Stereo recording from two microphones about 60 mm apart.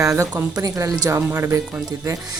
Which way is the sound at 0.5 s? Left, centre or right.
Right.